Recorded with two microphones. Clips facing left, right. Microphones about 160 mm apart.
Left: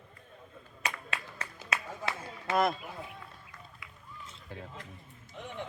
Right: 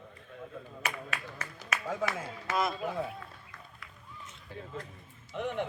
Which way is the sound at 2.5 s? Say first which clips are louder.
Left 3 dB; 55° left (ahead or behind).